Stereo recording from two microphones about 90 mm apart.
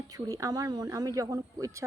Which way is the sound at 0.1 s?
40° right (ahead or behind).